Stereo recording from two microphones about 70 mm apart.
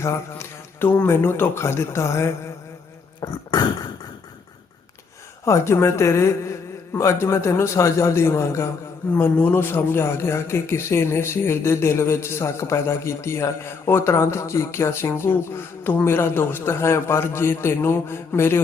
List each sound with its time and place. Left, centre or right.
0.0 s a man's voice: left
3.2 s cough: left
5.5 s speech: left
9.1 s speech: left